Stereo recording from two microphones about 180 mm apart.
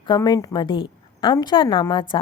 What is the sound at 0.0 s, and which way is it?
A woman's voice, 25° left (ahead or behind).